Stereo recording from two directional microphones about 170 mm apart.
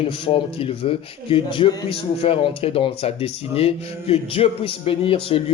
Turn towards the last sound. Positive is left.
turn(degrees=35)  # may be behind; listen again after turning